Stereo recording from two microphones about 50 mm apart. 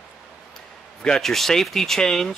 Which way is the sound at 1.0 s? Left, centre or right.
Centre.